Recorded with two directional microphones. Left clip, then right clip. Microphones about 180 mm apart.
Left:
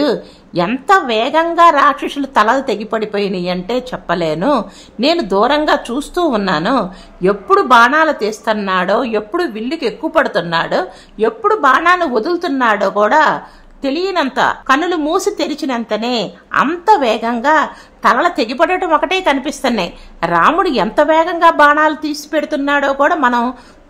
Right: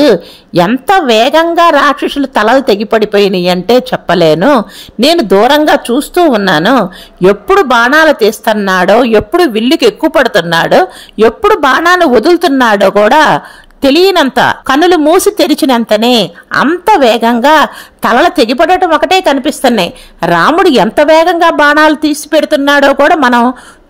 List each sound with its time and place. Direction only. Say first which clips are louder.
0.0 s a woman's voice: right 9 dB; 30° right (ahead or behind)